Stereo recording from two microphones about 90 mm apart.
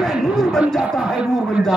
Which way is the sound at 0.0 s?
Centre (ahead or behind).